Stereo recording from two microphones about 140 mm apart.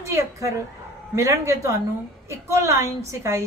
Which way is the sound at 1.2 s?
20° right (ahead or behind).